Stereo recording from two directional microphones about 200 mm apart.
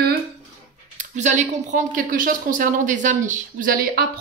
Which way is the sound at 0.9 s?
40° right (ahead or behind).